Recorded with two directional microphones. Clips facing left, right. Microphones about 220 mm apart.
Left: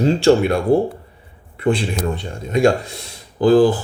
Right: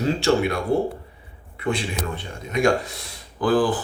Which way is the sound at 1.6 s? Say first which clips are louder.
Left 7 dB; 30° left (ahead or behind).